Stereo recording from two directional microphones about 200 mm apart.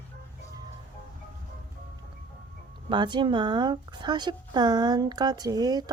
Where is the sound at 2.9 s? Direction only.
20° right (ahead or behind).